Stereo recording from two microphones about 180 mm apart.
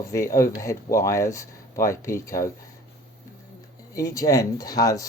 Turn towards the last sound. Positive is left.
turn(degrees=20)  # may be behind; listen again after turning